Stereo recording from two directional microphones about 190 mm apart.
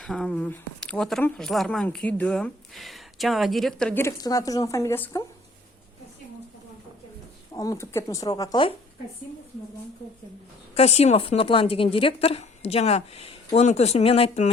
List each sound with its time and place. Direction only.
0.0 s speech: 5° left (ahead or behind)
7.5 s speech: 15° left (ahead or behind)
10.8 s speech: 35° left (ahead or behind)